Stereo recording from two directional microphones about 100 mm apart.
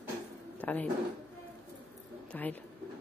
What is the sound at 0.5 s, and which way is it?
Speech, 15° left (ahead or behind).